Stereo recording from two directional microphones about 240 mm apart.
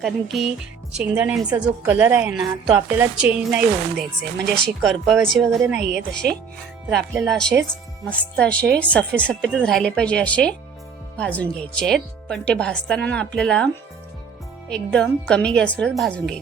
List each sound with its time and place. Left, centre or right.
0.0 s a woman's voice: centre
4.4 s speech: right
4.8 s speech: centre
14.7 s speech: centre